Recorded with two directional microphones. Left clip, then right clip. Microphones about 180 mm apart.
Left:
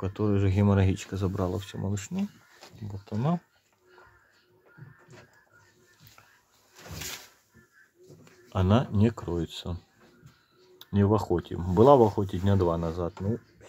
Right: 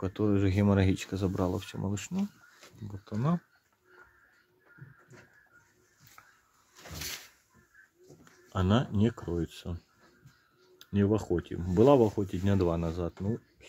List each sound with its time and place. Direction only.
0.0 s speech: 10° right (ahead or behind)
8.5 s speech: 5° right (ahead or behind)
10.8 s speech: 5° right (ahead or behind)